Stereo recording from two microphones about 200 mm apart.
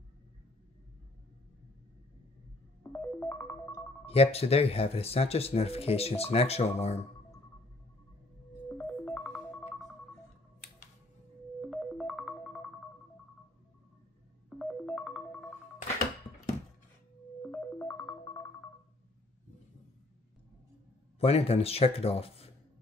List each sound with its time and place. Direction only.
2.8 s music: 15° left (ahead or behind)
4.0 s speech: 30° left (ahead or behind)
8.7 s music: 5° left (ahead or behind)
11.7 s music: centre (ahead or behind)
14.6 s music: centre (ahead or behind)
17.4 s music: 10° left (ahead or behind)
21.2 s speech: 30° left (ahead or behind)